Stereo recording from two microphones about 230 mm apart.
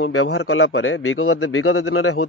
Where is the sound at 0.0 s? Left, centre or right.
Left.